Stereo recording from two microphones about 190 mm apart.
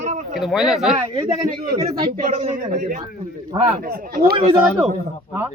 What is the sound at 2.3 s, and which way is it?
A man's voice, 40° right (ahead or behind).